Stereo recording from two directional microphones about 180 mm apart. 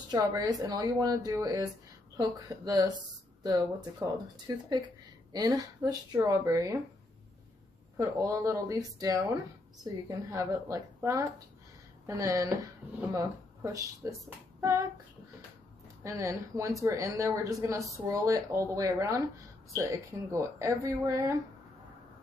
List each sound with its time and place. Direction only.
0.1 s speech: 20° right (ahead or behind)
8.0 s speech: 20° right (ahead or behind)
14.6 s child singing: 15° right (ahead or behind)
16.0 s speech: 15° right (ahead or behind)